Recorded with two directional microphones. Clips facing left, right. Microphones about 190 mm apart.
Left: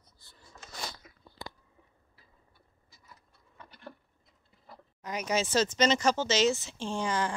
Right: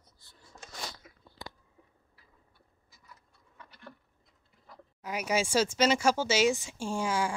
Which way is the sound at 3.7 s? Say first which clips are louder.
Left 3 dB; 30° left (ahead or behind).